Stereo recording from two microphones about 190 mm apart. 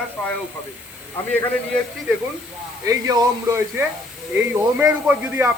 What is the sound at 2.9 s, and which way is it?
A man's voice, 20° right (ahead or behind).